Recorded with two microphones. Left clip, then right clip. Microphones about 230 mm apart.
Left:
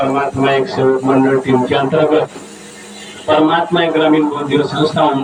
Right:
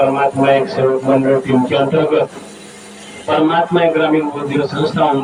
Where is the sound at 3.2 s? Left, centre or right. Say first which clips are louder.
Left 2 dB; left.